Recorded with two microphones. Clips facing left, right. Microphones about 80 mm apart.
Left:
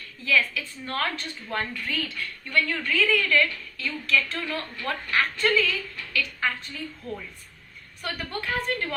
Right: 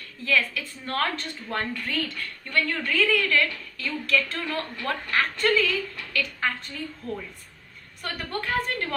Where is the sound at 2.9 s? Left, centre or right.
Right.